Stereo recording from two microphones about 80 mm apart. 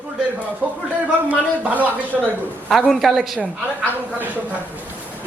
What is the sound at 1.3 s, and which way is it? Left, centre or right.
Speech, centre.